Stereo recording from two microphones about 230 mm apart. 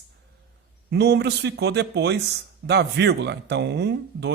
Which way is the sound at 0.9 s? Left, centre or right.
Right.